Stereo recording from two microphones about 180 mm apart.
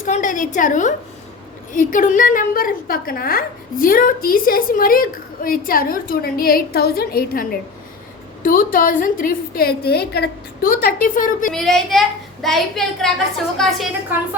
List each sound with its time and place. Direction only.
0.0 s a woman's voice: 45° left (ahead or behind)
8.4 s a woman's voice: 50° left (ahead or behind)
11.5 s a child's voice: centre (ahead or behind)